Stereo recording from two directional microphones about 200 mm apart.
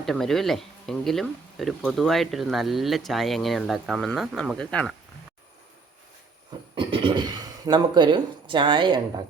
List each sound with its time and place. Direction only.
0.0 s speech: centre (ahead or behind)
6.7 s speech: 25° right (ahead or behind)